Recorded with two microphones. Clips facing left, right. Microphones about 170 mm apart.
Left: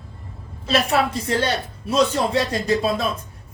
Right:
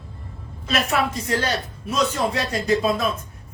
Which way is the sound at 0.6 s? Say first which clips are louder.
Left 3 dB; 30° left (ahead or behind).